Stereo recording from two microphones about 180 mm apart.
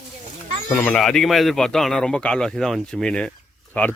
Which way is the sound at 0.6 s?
10° left (ahead or behind).